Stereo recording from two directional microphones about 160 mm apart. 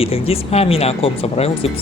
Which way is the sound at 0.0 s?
35° left (ahead or behind).